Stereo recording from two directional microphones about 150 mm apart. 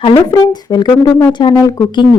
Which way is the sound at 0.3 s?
30° left (ahead or behind).